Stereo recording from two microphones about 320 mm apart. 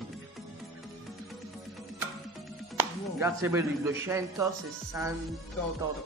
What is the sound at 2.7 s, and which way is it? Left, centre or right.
A man's voice, centre.